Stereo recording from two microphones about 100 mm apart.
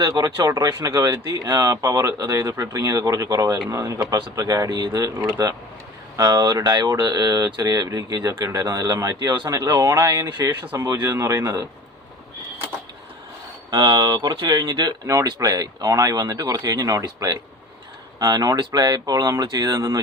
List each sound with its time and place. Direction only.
0.1 s speech: 30° right (ahead or behind)
1.0 s speech: 35° right (ahead or behind)
13.7 s speech: 45° right (ahead or behind)
15.0 s speech: 35° right (ahead or behind)